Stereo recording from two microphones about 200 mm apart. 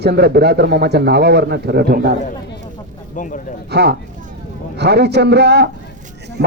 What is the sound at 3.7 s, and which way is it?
A man's voice, 55° right (ahead or behind).